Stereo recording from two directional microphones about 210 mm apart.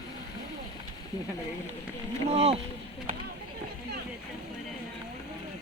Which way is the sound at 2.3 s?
30° right (ahead or behind).